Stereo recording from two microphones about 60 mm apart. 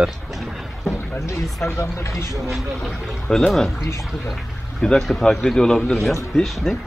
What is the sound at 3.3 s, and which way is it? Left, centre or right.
Speech, centre.